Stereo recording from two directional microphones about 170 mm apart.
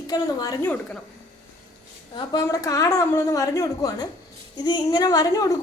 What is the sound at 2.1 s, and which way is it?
A woman's voice, 25° left (ahead or behind).